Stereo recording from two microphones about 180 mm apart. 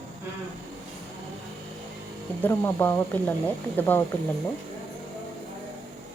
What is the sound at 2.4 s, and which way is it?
Speech, 10° left (ahead or behind).